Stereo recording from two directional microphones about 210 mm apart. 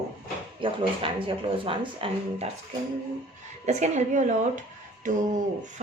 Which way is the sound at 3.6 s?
35° right (ahead or behind).